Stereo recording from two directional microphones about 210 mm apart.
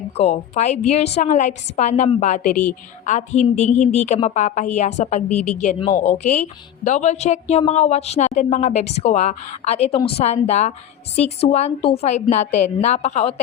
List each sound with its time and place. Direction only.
0.2 s a woman's voice: 30° left (ahead or behind)